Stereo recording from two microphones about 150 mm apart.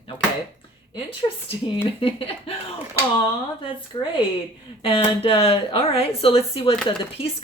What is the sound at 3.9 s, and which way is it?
Speech, 35° left (ahead or behind).